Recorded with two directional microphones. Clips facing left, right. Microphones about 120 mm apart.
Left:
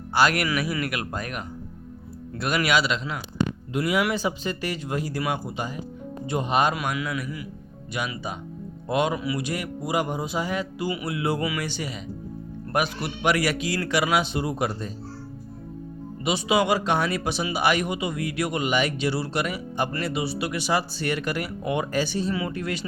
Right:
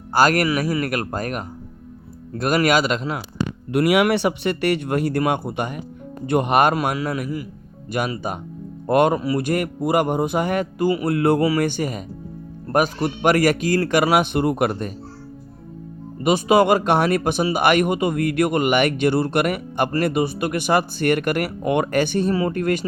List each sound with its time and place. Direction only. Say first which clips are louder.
0.1 s speech: right 5 dB; 45° right (ahead or behind)
3.7 s speech: right 9 dB; 70° right (ahead or behind)
6.7 s speech: right 6 dB; 40° right (ahead or behind); by 11.3 s 55° right (ahead or behind)
11.3 s speech: right 9 dB; 40° right (ahead or behind)
11.6 s speech: right 9 dB; 50° right (ahead or behind)
16.2 s speech: right 7 dB; 45° right (ahead or behind)
22.4 s speech: right 8 dB; 45° right (ahead or behind)